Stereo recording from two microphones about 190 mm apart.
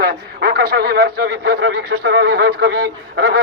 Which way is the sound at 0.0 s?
55° right (ahead or behind).